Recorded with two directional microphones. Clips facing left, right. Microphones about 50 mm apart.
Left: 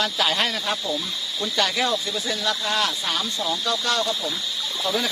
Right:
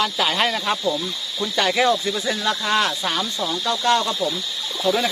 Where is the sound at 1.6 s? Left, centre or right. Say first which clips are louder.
Right 5 dB; centre.